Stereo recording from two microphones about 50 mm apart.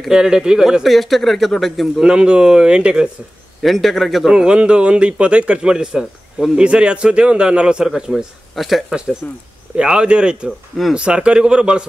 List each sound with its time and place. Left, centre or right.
0.1 s speech: centre
2.0 s speech: centre
3.6 s speech: centre
4.3 s a man's voice: centre
7.9 s speech: centre
9.2 s speech: left
9.8 s a man's voice: centre